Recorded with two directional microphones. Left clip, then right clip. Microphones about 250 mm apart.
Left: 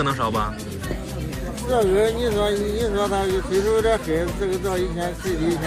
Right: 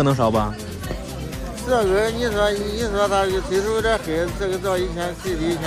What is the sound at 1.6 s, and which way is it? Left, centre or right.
Speech, right.